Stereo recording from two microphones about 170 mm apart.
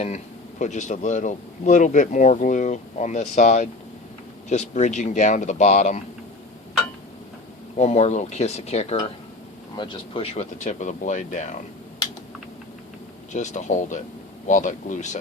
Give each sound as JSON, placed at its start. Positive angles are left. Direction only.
{"t": 0.6, "sound": "speech", "side_deg": 45}
{"t": 7.8, "sound": "speech", "side_deg": 40}
{"t": 9.7, "sound": "speech", "side_deg": 30}
{"t": 10.6, "sound": "speech", "side_deg": 45}
{"t": 13.3, "sound": "speech", "side_deg": 45}